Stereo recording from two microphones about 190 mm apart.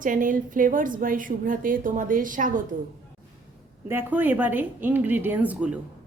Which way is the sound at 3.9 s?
10° right (ahead or behind).